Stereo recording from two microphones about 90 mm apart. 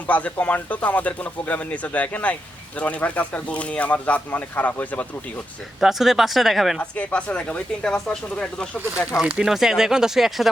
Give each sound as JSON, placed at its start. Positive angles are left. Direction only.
{"t": 0.1, "sound": "speech", "side_deg": 15}
{"t": 5.8, "sound": "speech", "side_deg": -5}
{"t": 6.7, "sound": "speech", "side_deg": 15}
{"t": 9.1, "sound": "speech", "side_deg": -10}